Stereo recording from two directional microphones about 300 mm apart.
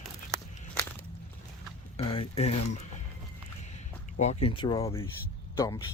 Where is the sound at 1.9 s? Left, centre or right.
Centre.